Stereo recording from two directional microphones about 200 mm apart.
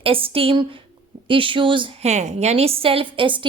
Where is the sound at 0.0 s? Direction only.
25° right (ahead or behind).